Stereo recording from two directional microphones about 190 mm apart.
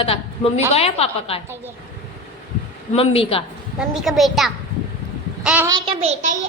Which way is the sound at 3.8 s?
Centre (ahead or behind).